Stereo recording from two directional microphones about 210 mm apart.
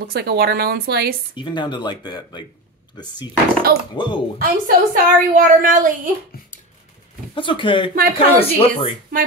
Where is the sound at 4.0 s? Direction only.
20° left (ahead or behind).